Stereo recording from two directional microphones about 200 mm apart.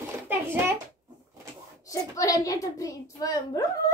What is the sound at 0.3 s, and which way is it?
Speech, 10° right (ahead or behind).